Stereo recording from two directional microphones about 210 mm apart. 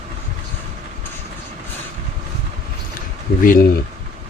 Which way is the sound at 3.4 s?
40° left (ahead or behind).